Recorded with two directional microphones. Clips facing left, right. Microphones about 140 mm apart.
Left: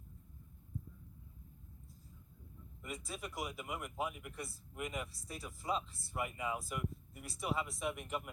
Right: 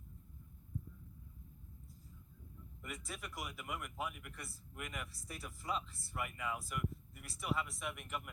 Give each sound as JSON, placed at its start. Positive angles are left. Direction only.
{"t": 2.8, "sound": "speech", "side_deg": 25}